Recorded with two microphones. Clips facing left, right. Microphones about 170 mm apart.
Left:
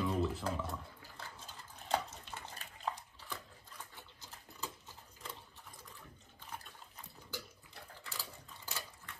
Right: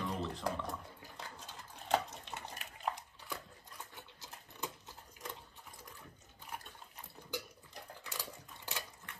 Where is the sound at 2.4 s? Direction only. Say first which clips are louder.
Right 1 dB; 15° right (ahead or behind).